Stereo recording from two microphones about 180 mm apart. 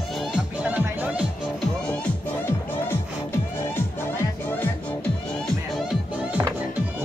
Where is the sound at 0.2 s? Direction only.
5° right (ahead or behind).